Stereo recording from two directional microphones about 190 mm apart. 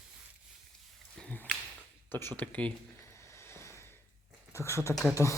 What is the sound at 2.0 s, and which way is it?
Speech, 10° left (ahead or behind).